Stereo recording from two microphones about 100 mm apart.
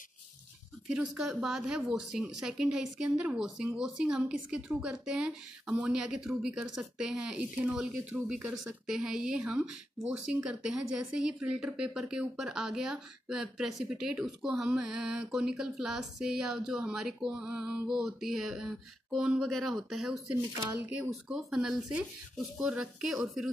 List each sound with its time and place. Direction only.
0.8 s speech: 10° right (ahead or behind)
20.7 s speech: 20° right (ahead or behind)
21.1 s speech: centre (ahead or behind)